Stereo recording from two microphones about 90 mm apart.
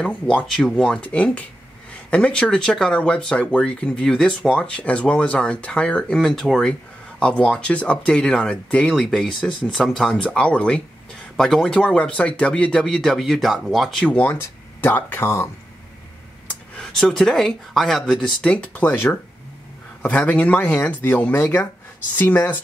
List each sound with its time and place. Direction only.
0.0 s speech: 10° left (ahead or behind)
1.0 s speech: 15° left (ahead or behind)
6.1 s speech: centre (ahead or behind)
14.0 s speech: 15° left (ahead or behind)
16.7 s speech: 5° left (ahead or behind)
18.4 s speech: 15° left (ahead or behind)